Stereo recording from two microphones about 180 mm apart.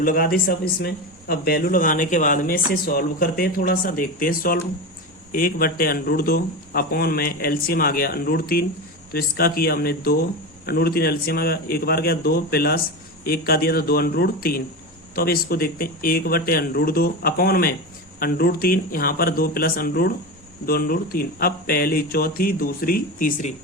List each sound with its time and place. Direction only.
0.0 s a man's voice: 55° left (ahead or behind)